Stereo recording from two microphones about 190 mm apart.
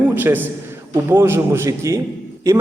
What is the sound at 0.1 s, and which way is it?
A man's voice, 10° right (ahead or behind).